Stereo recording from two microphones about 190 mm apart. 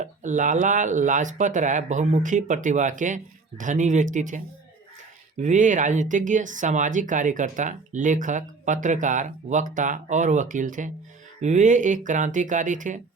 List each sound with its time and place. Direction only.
0.0 s speech: 40° right (ahead or behind)
5.4 s speech: 40° right (ahead or behind)